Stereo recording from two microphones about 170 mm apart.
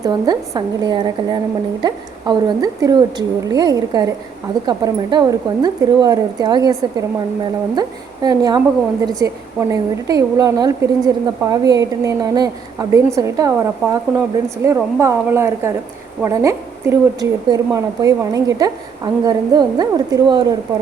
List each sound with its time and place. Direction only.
0.0 s a woman's voice: 20° right (ahead or behind)
7.8 s a woman's voice: 20° right (ahead or behind)